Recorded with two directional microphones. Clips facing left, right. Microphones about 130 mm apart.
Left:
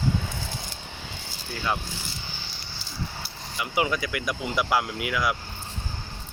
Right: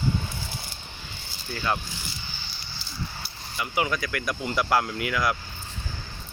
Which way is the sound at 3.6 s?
20° left (ahead or behind).